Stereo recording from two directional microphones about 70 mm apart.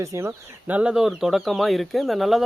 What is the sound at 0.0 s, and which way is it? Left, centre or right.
Speech, right.